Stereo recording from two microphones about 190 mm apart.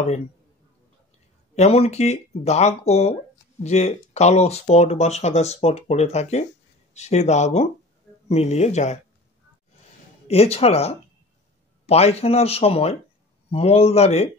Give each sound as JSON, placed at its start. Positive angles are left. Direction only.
{"t": 1.5, "sound": "speech", "side_deg": 35}
{"t": 10.2, "sound": "speech", "side_deg": 30}